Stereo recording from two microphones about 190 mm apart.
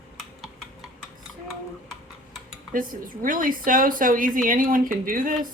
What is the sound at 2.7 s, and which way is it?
Speech, 45° right (ahead or behind).